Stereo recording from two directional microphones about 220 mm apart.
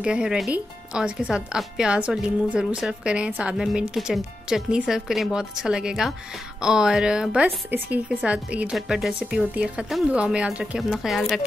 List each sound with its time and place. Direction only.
0.0 s a woman's voice: 5° right (ahead or behind)